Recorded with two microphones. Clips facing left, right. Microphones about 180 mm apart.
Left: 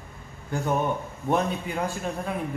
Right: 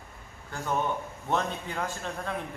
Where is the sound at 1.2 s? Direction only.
15° left (ahead or behind).